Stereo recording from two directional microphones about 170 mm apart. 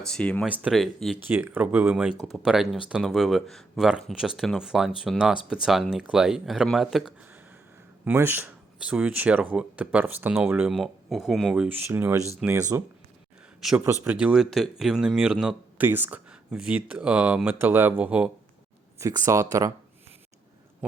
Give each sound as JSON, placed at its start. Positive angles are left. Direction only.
{"t": 0.0, "sound": "speech", "side_deg": 5}
{"t": 0.4, "sound": "speech", "side_deg": -5}
{"t": 12.4, "sound": "speech", "side_deg": -5}
{"t": 13.6, "sound": "speech", "side_deg": 0}
{"t": 18.9, "sound": "speech", "side_deg": -20}